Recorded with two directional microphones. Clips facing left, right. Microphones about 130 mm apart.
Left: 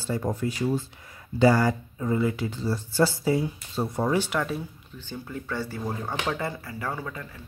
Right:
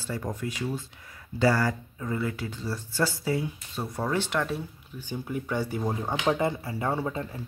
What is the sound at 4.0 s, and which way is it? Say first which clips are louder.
Speech: left 2 dB; 10° left (ahead or behind).